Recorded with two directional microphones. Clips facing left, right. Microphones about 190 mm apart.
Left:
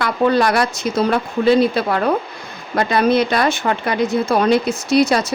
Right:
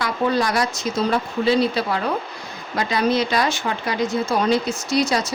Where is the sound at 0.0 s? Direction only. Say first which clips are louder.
Left 5 dB; 60° left (ahead or behind).